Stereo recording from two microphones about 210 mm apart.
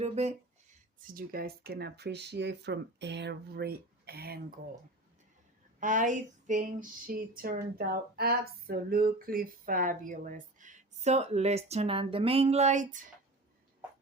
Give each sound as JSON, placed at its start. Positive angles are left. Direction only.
{"t": 0.0, "sound": "a sound", "side_deg": -30}
{"t": 1.0, "sound": "speech", "side_deg": -45}
{"t": 5.8, "sound": "female singing", "side_deg": -40}